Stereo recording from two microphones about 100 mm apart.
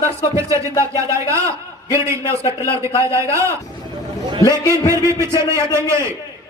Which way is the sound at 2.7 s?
30° right (ahead or behind).